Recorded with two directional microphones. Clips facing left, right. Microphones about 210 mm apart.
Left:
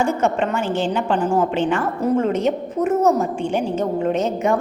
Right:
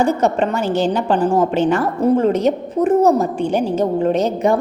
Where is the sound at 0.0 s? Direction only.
35° right (ahead or behind).